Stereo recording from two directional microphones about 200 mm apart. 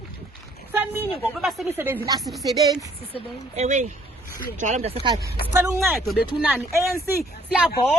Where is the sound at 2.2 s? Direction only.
Centre (ahead or behind).